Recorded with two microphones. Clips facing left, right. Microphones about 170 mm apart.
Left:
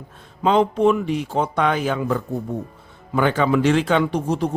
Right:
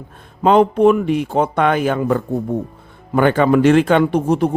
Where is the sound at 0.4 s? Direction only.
55° right (ahead or behind).